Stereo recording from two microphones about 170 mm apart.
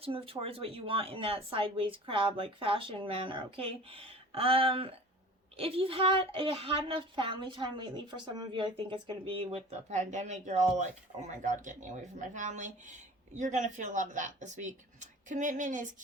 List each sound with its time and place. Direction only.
0.0 s a woman's voice: 35° right (ahead or behind)